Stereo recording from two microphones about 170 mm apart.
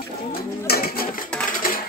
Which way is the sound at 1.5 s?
55° left (ahead or behind).